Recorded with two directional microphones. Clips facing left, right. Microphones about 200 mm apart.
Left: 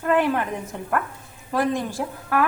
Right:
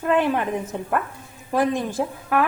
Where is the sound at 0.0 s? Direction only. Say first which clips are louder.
Even; 20° right (ahead or behind).